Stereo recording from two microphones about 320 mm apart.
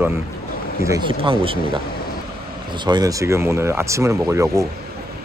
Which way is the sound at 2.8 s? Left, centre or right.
Centre.